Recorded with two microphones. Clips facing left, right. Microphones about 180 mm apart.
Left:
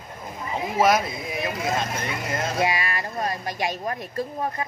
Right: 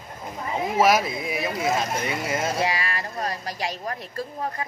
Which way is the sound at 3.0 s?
25° left (ahead or behind).